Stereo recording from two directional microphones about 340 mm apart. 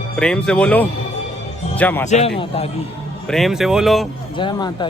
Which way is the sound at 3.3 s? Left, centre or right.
Centre.